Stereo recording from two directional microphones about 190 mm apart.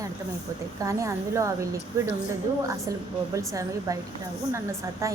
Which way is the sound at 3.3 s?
15° right (ahead or behind).